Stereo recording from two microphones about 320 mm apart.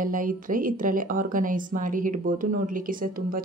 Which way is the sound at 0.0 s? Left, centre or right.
Right.